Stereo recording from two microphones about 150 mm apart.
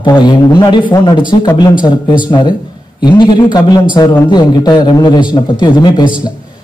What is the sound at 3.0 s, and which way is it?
Speech, 30° left (ahead or behind).